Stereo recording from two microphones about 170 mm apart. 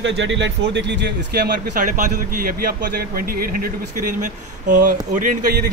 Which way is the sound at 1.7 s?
55° right (ahead or behind).